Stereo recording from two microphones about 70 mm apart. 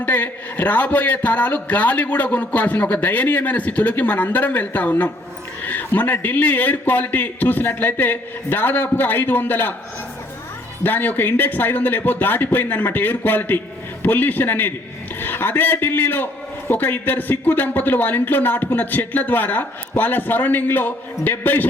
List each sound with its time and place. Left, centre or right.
0.0 s a man's voice: left
10.8 s a man's voice: left